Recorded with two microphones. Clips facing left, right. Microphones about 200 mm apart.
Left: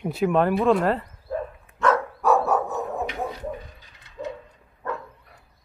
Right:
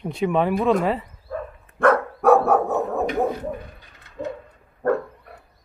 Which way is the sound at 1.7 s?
55° right (ahead or behind).